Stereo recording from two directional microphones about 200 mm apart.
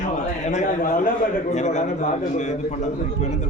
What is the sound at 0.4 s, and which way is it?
A man's voice, 35° left (ahead or behind).